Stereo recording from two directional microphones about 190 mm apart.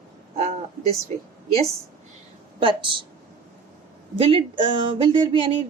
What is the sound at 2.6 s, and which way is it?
Speech, 25° right (ahead or behind).